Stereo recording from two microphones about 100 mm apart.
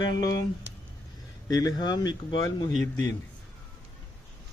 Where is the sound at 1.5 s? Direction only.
40° left (ahead or behind).